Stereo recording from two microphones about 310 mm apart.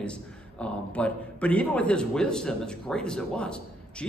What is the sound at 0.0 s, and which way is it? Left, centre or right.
A man's voice, centre.